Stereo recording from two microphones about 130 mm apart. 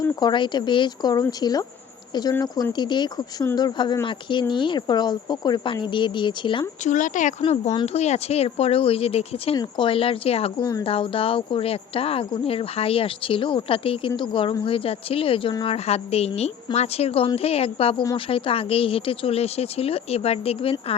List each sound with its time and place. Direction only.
0.2 s speech: 35° left (ahead or behind)
6.8 s speech: 75° left (ahead or behind)
7.4 s speech: 55° left (ahead or behind)
10.6 s speech: 30° left (ahead or behind)
10.8 s speech: 45° left (ahead or behind)